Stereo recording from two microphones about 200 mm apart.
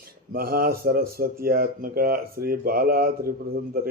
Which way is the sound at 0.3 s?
50° right (ahead or behind).